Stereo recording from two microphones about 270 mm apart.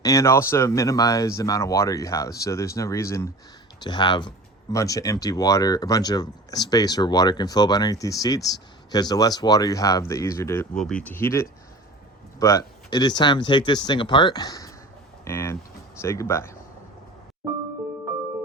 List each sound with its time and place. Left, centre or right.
0.0 s speech: centre